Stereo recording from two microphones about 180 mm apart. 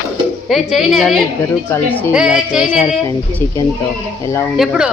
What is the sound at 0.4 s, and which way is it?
Speech, centre (ahead or behind).